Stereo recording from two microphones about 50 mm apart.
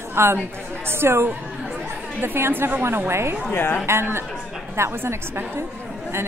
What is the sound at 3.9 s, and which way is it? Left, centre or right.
Speech, right.